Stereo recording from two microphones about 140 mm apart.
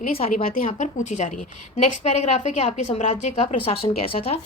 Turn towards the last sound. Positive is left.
turn(degrees=40)  # may be behind; listen again after turning